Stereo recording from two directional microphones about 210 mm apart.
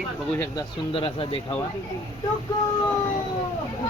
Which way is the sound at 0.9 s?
25° left (ahead or behind).